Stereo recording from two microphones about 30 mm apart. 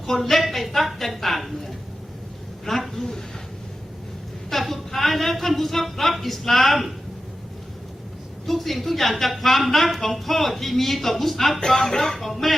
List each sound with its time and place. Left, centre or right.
0.0 s a woman's voice: centre
4.7 s speech: centre
8.4 s a woman's voice: centre
11.6 s speech: left
12.2 s a woman's voice: centre